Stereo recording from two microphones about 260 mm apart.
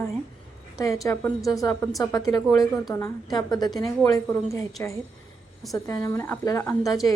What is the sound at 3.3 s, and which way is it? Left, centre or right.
A woman's voice, centre.